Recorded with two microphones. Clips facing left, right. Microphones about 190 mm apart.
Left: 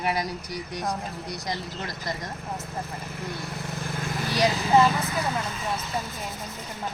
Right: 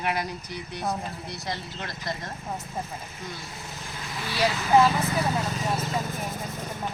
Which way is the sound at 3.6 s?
55° left (ahead or behind).